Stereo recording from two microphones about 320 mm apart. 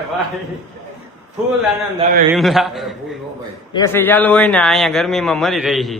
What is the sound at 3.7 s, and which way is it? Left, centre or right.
A man's voice, centre.